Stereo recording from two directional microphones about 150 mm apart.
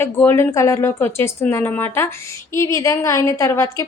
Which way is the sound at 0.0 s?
15° left (ahead or behind).